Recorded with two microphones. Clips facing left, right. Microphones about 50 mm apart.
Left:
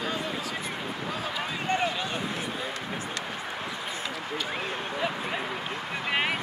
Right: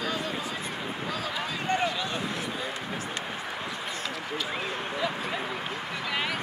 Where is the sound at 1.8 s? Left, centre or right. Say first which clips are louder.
Even; centre.